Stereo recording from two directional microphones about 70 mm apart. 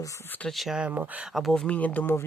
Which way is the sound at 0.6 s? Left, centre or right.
Centre.